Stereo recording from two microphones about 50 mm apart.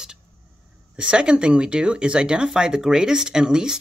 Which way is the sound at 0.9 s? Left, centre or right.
Right.